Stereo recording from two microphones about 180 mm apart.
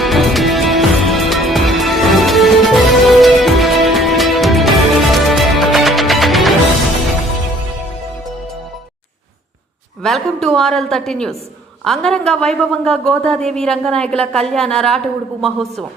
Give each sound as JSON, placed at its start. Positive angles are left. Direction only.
{"t": 0.0, "sound": "music", "side_deg": 0}
{"t": 10.0, "sound": "a woman's voice", "side_deg": 5}